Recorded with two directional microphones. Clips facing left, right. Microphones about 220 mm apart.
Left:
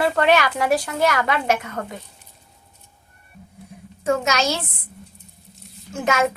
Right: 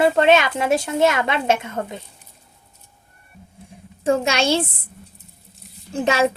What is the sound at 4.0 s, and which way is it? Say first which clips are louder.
Speech: right 2 dB; 30° right (ahead or behind).